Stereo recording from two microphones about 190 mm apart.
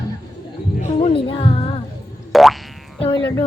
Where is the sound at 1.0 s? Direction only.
25° left (ahead or behind).